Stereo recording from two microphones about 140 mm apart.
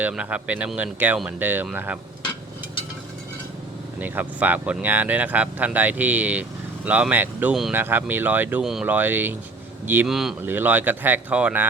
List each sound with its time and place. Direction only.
0.0 s speech: 10° right (ahead or behind)
4.0 s speech: 10° right (ahead or behind)
10.1 s speech: centre (ahead or behind)
10.4 s speech: 15° right (ahead or behind)